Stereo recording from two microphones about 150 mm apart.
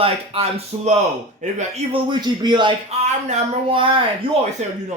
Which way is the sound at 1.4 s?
55° right (ahead or behind).